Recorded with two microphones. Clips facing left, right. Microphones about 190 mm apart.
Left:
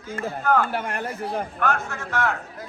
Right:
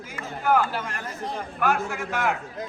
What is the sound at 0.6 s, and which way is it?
Speech, 60° left (ahead or behind).